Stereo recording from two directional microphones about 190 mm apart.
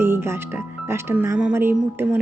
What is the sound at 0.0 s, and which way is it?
Speech, 10° right (ahead or behind).